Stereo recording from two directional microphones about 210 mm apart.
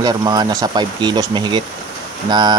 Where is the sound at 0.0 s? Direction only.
20° right (ahead or behind).